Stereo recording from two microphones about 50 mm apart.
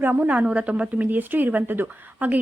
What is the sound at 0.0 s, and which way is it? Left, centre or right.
Speech, right.